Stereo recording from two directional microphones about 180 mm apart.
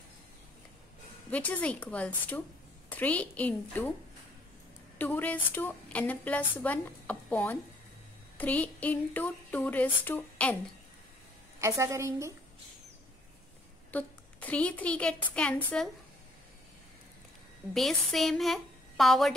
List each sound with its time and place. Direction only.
1.3 s a woman's voice: 10° left (ahead or behind)
4.9 s a woman's voice: 10° left (ahead or behind)
11.6 s a woman's voice: 15° right (ahead or behind)
13.9 s a woman's voice: 10° left (ahead or behind)
17.7 s a woman's voice: centre (ahead or behind)